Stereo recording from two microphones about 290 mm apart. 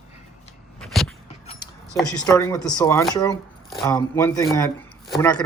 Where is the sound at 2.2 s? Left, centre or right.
Centre.